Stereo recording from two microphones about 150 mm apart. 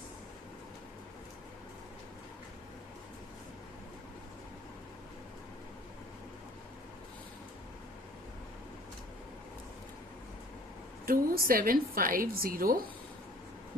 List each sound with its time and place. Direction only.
11.0 s a woman's voice: 75° right (ahead or behind)